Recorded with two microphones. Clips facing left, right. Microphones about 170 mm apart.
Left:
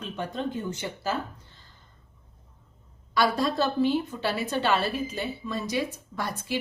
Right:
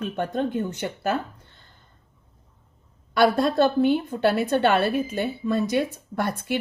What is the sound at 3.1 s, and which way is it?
A woman's voice, 60° right (ahead or behind).